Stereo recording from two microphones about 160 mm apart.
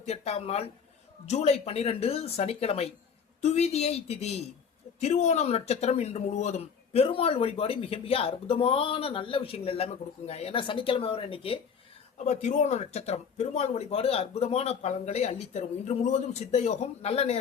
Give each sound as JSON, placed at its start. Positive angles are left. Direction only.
{"t": 0.0, "sound": "speech", "side_deg": 40}
{"t": 12.1, "sound": "speech", "side_deg": 45}